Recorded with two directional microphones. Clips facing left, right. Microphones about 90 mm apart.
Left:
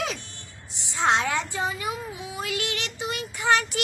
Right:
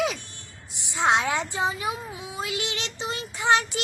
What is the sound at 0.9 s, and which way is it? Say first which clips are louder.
A woman's voice: right 1 dB; 15° right (ahead or behind).